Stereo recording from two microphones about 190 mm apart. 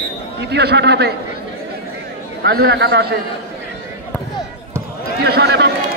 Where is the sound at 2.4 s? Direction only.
60° right (ahead or behind).